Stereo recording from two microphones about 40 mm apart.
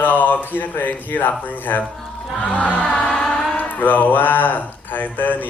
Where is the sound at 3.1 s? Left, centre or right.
Left.